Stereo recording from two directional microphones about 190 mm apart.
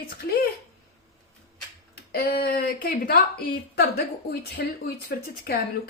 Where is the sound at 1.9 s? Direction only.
55° left (ahead or behind).